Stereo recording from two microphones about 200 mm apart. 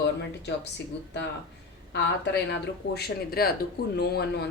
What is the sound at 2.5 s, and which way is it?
Speech, 55° left (ahead or behind).